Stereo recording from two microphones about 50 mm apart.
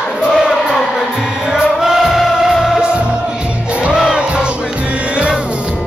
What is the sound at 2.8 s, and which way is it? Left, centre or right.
Music, right.